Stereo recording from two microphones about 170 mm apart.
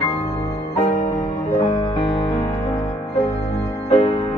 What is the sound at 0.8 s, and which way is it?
Music, 35° left (ahead or behind).